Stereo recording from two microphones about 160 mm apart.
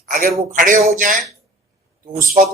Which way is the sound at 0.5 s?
55° right (ahead or behind).